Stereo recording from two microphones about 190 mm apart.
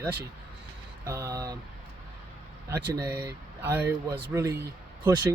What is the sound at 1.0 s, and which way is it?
Speech, 15° right (ahead or behind).